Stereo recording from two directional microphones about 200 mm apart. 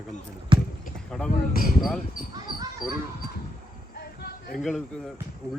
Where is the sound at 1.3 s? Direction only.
45° left (ahead or behind).